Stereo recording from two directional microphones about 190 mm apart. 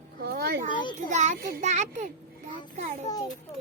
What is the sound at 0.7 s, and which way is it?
Speech, 25° left (ahead or behind).